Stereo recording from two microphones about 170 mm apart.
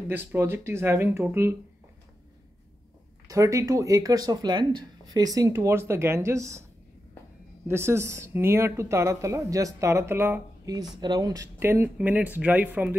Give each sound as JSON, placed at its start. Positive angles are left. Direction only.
{"t": 0.1, "sound": "speech", "side_deg": -10}
{"t": 3.3, "sound": "speech", "side_deg": -20}
{"t": 7.6, "sound": "speech", "side_deg": -15}